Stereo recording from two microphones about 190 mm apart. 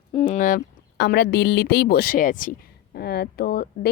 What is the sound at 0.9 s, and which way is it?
Speech, 60° left (ahead or behind).